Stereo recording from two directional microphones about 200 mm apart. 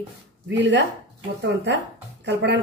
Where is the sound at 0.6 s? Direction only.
65° right (ahead or behind).